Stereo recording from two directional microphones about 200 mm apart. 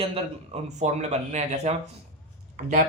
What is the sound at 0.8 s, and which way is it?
Speech, 35° right (ahead or behind).